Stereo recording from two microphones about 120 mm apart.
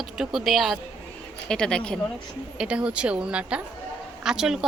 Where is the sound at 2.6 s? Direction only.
10° right (ahead or behind).